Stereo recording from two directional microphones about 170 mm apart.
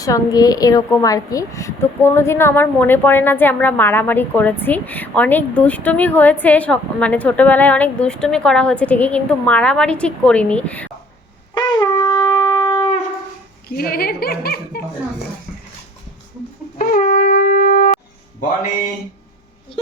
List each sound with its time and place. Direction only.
0.0 s a woman's voice: 20° left (ahead or behind)
11.5 s shofar: 25° left (ahead or behind)
13.7 s speech: 60° left (ahead or behind)
16.7 s wind instrument: 60° left (ahead or behind)
17.2 s shofar: 60° left (ahead or behind)